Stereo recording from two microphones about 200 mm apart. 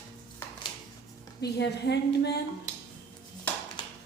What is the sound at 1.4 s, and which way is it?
Speech, 55° left (ahead or behind).